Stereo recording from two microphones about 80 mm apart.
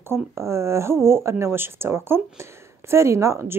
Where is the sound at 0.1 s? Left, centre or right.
Right.